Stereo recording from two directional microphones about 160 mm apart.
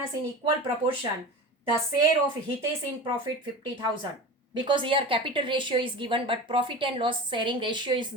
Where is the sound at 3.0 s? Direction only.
30° right (ahead or behind).